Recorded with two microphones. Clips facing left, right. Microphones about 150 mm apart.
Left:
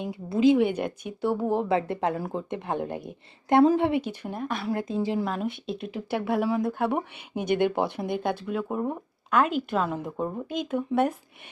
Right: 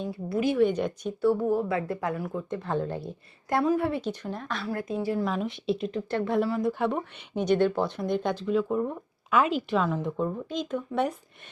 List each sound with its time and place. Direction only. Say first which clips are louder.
0.0 s a woman's voice: left 5 dB; 20° left (ahead or behind)
5.2 s speech: right 1 dB; centre (ahead or behind)
7.5 s speech: even; 15° left (ahead or behind)